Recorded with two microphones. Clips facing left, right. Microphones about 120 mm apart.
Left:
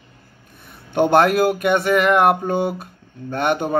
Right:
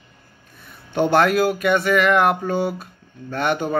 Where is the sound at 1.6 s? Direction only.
55° left (ahead or behind).